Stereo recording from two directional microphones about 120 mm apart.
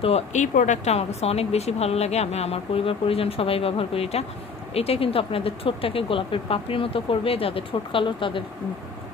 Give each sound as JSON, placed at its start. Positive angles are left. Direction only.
{"t": 0.0, "sound": "speech", "side_deg": 70}